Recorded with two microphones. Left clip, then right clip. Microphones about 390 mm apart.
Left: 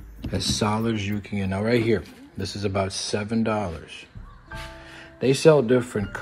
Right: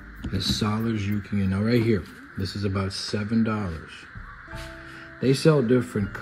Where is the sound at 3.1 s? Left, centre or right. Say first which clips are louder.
Left 2 dB; left.